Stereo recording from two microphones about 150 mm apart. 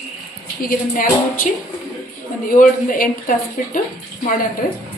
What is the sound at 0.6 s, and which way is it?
A woman's voice, 70° left (ahead or behind).